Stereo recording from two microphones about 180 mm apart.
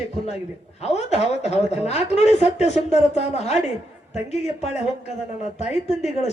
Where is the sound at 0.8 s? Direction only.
35° left (ahead or behind).